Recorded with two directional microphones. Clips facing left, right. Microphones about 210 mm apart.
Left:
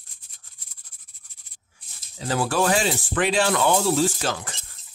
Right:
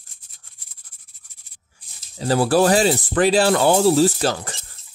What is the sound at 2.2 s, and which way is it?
Speech, 35° right (ahead or behind).